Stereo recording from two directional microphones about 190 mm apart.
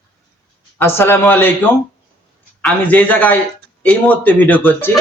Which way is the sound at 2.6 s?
10° left (ahead or behind).